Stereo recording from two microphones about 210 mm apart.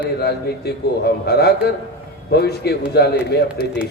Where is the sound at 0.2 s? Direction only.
50° left (ahead or behind).